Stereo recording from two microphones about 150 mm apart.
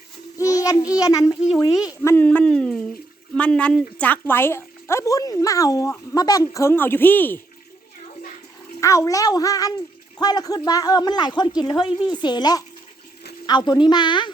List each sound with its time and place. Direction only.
0.3 s a child's voice: 20° left (ahead or behind)
8.8 s speech: 20° left (ahead or behind)